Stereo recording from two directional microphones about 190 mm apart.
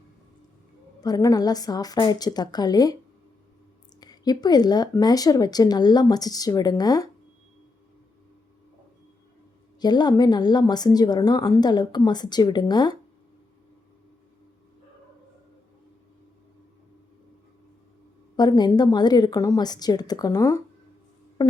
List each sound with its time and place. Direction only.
1.0 s a woman's voice: 20° left (ahead or behind)
4.0 s a woman's voice: 20° left (ahead or behind)
9.8 s a woman's voice: 20° left (ahead or behind)
18.3 s a woman's voice: 20° left (ahead or behind)